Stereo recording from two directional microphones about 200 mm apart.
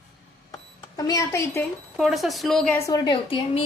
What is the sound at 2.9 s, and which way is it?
Speech, 25° left (ahead or behind).